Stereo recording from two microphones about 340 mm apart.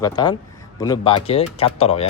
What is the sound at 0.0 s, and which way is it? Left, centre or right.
Speech, centre.